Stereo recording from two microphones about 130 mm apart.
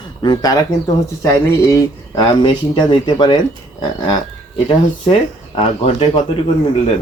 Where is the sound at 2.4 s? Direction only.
35° left (ahead or behind).